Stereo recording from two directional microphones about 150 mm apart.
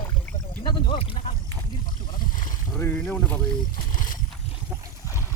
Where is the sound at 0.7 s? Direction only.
35° left (ahead or behind).